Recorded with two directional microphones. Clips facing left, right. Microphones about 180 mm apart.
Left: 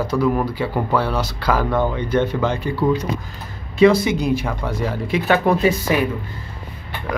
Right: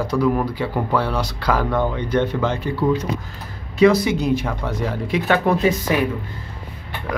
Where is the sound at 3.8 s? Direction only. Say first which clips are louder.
Left 1 dB; 25° left (ahead or behind).